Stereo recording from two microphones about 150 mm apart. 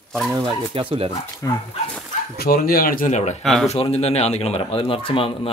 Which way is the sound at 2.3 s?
90° left.